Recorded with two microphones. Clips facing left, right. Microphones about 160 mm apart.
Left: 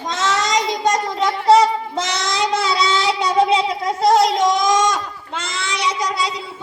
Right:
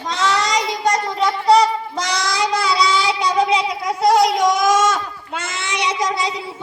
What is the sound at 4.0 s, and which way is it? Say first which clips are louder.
Goat: even; centre (ahead or behind).